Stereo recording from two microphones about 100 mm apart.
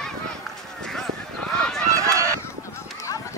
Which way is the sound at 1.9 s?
30° right (ahead or behind).